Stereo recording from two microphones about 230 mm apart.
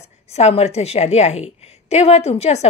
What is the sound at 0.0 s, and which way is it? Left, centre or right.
A woman's voice, left.